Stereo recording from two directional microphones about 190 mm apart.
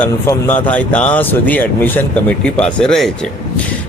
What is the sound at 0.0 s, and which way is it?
Speech, 10° left (ahead or behind).